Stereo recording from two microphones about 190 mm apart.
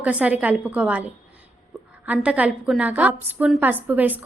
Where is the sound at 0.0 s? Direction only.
5° right (ahead or behind).